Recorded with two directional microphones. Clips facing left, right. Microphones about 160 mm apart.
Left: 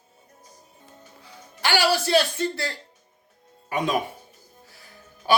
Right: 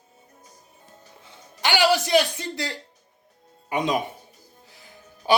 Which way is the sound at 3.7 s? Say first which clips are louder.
Right 1 dB; 20° right (ahead or behind).